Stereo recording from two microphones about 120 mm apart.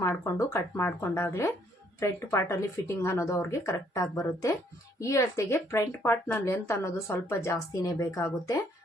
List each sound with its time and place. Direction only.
0.0 s speech: 25° left (ahead or behind)